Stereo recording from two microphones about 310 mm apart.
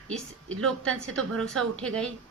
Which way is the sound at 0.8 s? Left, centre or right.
Centre.